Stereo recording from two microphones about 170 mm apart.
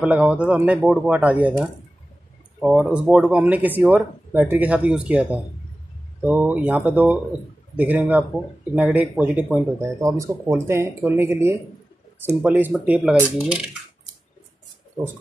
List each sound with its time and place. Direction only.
0.0 s speech: 10° right (ahead or behind)